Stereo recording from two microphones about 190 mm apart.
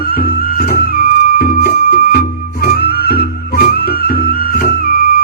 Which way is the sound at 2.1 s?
55° left (ahead or behind).